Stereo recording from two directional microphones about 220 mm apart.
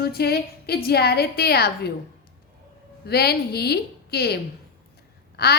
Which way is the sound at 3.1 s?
45° left (ahead or behind).